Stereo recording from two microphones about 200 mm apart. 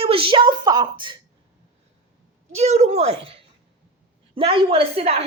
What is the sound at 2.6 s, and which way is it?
A woman's voice, 35° right (ahead or behind).